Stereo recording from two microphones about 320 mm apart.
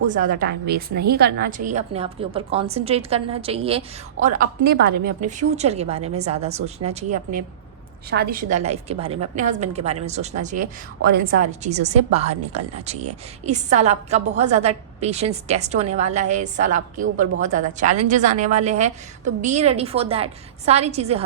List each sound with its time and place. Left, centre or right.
0.0 s a woman's voice: right